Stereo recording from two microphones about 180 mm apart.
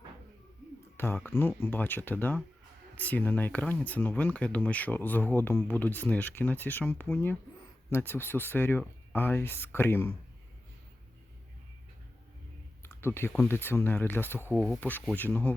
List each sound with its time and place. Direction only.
0.9 s speech: 10° left (ahead or behind)
12.8 s speech: 15° left (ahead or behind)